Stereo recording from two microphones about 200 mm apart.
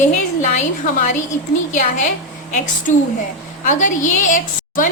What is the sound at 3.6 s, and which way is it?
A woman's voice, 40° left (ahead or behind).